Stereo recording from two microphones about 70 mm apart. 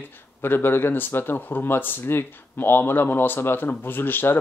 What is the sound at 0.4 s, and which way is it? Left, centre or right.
Speech, left.